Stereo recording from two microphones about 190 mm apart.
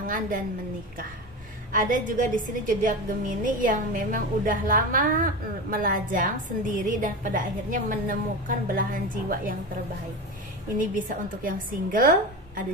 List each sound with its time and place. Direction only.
0.0 s a sound: 45° right (ahead or behind)
1.7 s a woman's voice: 45° right (ahead or behind)
10.8 s a woman's voice: 45° right (ahead or behind)